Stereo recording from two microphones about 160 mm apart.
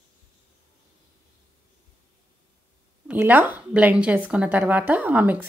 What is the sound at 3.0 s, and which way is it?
Speech, 10° right (ahead or behind).